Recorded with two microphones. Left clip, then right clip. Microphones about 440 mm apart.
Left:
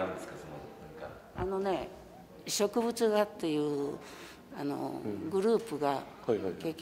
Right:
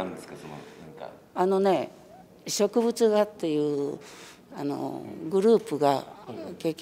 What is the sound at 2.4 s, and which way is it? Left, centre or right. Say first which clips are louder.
A woman's voice: right 6 dB; right.